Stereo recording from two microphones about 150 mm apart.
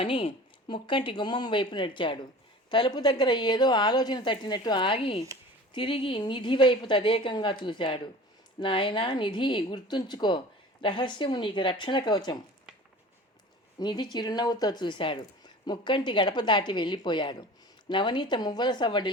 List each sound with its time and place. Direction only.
0.0 s a woman's voice: 35° left (ahead or behind)
13.7 s a woman's voice: 30° left (ahead or behind)